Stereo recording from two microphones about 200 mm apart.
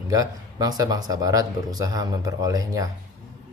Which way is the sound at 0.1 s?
20° right (ahead or behind).